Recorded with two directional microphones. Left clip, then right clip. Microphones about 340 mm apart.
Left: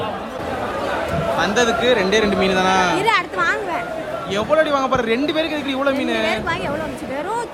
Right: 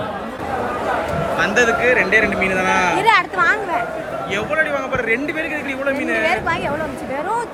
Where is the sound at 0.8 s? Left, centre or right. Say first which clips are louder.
Right 1 dB; centre.